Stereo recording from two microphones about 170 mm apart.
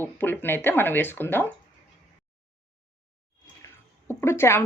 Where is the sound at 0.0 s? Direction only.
10° left (ahead or behind).